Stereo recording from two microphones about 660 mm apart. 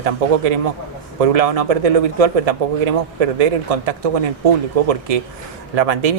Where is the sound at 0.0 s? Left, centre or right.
Right.